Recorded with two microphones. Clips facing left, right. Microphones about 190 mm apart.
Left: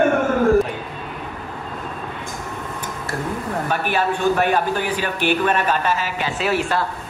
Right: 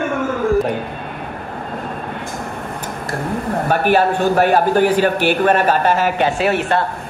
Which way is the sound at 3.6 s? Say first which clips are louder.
Right 7 dB; 45° right (ahead or behind).